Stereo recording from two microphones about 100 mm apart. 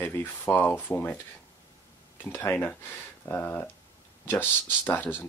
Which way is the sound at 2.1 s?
20° left (ahead or behind).